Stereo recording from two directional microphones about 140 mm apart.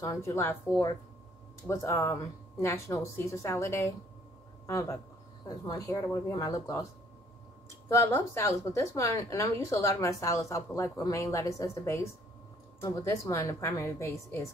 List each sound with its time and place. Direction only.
0.0 s a woman's voice: 20° left (ahead or behind)
1.7 s a woman's voice: 20° left (ahead or behind)
7.9 s a woman's voice: 20° left (ahead or behind)